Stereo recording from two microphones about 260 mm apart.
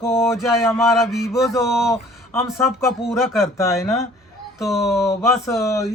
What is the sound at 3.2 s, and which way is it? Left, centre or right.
Speech, centre.